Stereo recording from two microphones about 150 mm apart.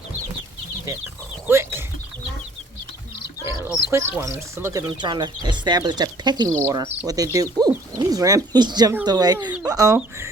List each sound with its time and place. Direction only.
1.5 s speech: 15° right (ahead or behind)
3.9 s speech: 20° right (ahead or behind)
4.9 s speech: 30° right (ahead or behind)